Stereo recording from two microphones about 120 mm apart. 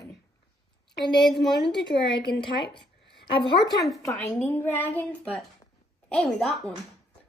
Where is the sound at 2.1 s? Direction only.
45° left (ahead or behind).